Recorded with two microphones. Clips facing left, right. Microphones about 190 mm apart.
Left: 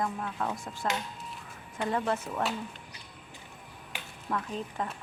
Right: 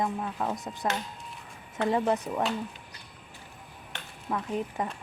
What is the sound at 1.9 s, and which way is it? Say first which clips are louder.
Speech: right 4 dB; 15° right (ahead or behind).